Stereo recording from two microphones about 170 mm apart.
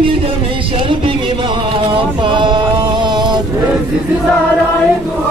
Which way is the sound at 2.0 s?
30° right (ahead or behind).